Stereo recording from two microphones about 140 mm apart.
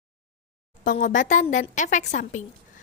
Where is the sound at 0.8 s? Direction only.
65° left (ahead or behind).